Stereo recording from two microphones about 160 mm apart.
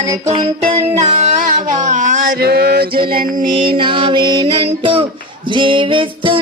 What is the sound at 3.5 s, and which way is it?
Music, 30° right (ahead or behind).